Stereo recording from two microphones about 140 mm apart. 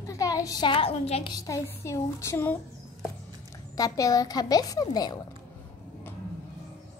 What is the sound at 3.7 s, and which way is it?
A woman's voice, 25° left (ahead or behind).